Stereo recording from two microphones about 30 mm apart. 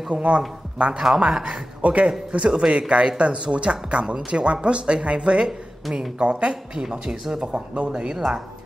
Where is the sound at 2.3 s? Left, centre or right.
Right.